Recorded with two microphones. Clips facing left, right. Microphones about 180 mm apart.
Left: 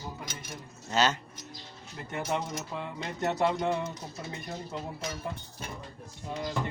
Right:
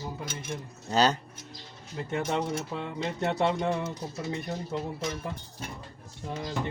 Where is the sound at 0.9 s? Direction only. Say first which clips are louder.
Right 3 dB; 35° right (ahead or behind).